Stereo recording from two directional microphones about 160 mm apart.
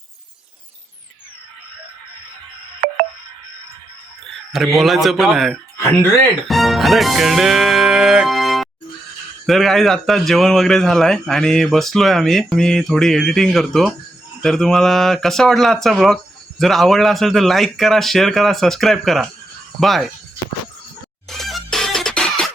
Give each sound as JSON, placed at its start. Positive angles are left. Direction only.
{"t": 2.8, "sound": "music", "side_deg": -55}
{"t": 4.8, "sound": "a man's voice", "side_deg": 0}
{"t": 6.5, "sound": "music", "side_deg": 0}
{"t": 9.5, "sound": "a man's voice", "side_deg": 0}
{"t": 21.2, "sound": "music", "side_deg": 0}